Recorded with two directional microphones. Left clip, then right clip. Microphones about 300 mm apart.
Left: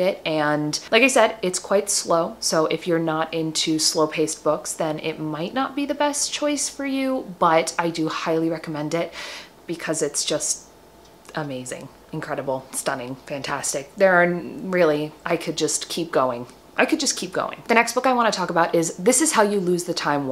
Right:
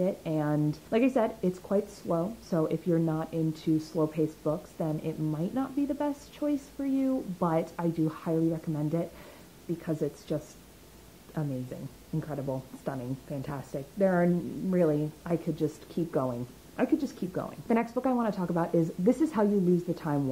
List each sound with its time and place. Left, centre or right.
0.2 s speech: centre
2.0 s a woman's voice: centre
3.9 s a woman's voice: centre